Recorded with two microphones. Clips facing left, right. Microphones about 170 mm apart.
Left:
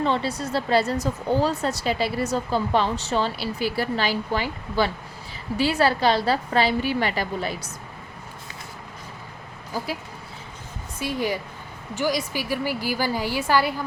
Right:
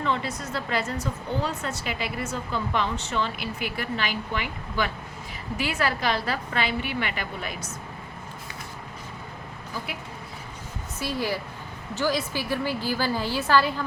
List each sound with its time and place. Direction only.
0.0 s a woman's voice: 35° left (ahead or behind)
11.0 s a woman's voice: 15° left (ahead or behind)